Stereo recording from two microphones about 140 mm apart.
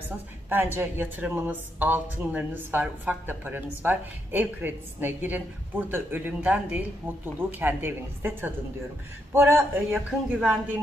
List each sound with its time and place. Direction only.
0.7 s speech: 15° right (ahead or behind)
9.9 s a woman's voice: centre (ahead or behind)